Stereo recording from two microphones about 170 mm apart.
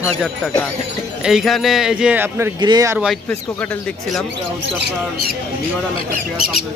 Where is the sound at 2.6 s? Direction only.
25° right (ahead or behind).